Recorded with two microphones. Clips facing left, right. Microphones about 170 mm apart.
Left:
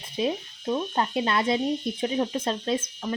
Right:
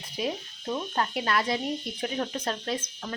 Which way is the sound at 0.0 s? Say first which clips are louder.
Left 4 dB; 25° left (ahead or behind).